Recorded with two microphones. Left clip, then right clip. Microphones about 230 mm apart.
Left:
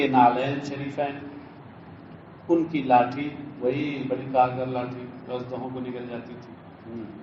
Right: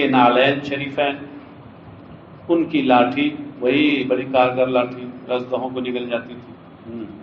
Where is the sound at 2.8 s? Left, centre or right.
Right.